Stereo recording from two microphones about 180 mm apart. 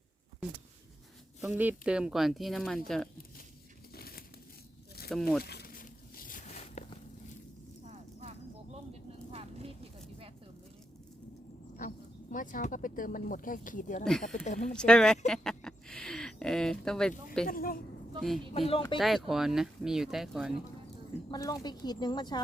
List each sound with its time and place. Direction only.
1.4 s speech: 10° right (ahead or behind)
3.9 s crumpling: 55° left (ahead or behind)
5.0 s speech: centre (ahead or behind)
5.4 s walk: 60° left (ahead or behind); by 7.3 s 40° left (ahead or behind)
7.9 s clip-clop: 35° right (ahead or behind)
9.3 s vehicle: 35° right (ahead or behind)
11.8 s speech: 45° left (ahead or behind)
14.0 s speech: 5° left (ahead or behind)
14.4 s speech: 40° left (ahead or behind)
14.7 s speech: 5° left (ahead or behind)
17.4 s a woman's voice: 55° left (ahead or behind)
18.5 s speech: 35° left (ahead or behind)
18.9 s speech: centre (ahead or behind)
21.2 s speech: 20° left (ahead or behind)